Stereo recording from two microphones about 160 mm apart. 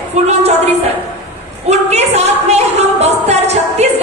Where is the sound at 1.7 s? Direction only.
45° right (ahead or behind).